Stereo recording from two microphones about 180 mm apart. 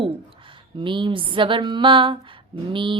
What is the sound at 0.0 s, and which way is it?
A woman's voice, 30° right (ahead or behind).